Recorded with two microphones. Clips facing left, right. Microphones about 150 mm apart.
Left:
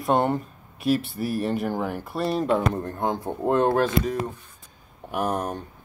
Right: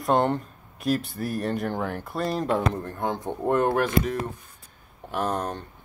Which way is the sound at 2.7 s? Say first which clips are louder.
Left 2 dB; 20° left (ahead or behind).